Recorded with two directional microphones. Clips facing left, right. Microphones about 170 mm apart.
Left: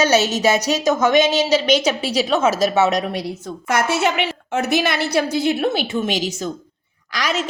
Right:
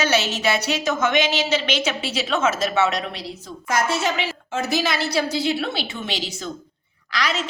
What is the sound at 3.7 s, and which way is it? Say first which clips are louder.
A woman's voice: left 3 dB; 65° left (ahead or behind).